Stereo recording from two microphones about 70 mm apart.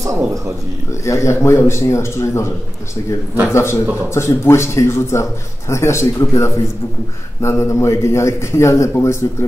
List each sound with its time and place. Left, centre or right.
1.0 s a man's voice: left